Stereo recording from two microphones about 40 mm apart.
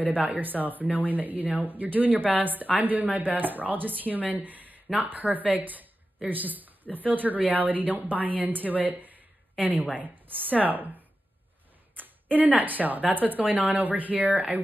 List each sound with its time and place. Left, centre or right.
0.0 s speech: right